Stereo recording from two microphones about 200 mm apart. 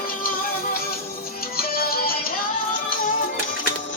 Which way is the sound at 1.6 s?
50° left (ahead or behind).